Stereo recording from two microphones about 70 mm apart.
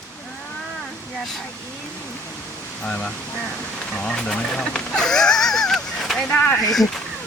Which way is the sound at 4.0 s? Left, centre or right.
Centre.